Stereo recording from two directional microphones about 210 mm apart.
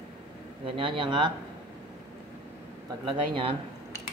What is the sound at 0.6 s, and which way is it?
Speech, 25° right (ahead or behind).